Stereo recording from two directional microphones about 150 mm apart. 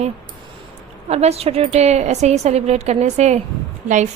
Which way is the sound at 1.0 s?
45° right (ahead or behind).